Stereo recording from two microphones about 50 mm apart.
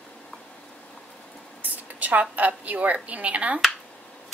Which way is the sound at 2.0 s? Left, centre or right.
Right.